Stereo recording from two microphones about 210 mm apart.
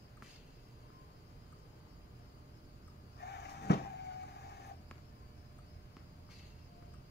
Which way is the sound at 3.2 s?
50° left (ahead or behind).